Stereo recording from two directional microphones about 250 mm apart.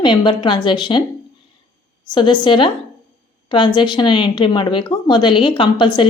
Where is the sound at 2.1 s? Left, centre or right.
Centre.